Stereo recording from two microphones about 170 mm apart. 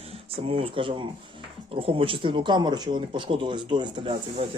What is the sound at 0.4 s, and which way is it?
Speech, 35° right (ahead or behind).